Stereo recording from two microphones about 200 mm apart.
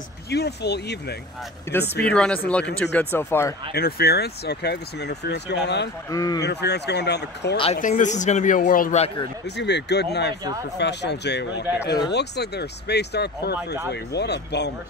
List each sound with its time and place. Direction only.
0.3 s speech: 55° left (ahead or behind)
2.0 s speech: 5° left (ahead or behind)
3.7 s speech: 50° left (ahead or behind)
6.0 s speech: 20° left (ahead or behind)
6.4 s speech: 55° left (ahead or behind)
7.5 s speech: 30° left (ahead or behind)
7.8 s a man's voice: 40° left (ahead or behind)
9.6 s speech: 60° left (ahead or behind)